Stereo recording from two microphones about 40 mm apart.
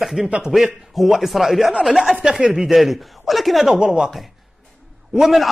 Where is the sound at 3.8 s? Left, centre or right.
Right.